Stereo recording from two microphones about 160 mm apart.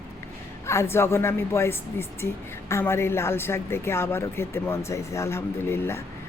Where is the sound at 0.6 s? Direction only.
15° left (ahead or behind).